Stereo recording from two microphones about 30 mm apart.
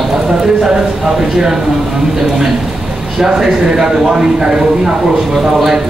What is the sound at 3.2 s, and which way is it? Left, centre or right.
A man's voice, right.